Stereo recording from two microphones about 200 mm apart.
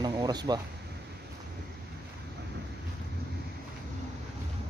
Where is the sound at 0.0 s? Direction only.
20° right (ahead or behind).